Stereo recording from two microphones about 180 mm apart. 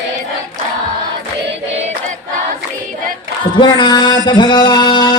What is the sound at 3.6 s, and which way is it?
Music, 25° left (ahead or behind).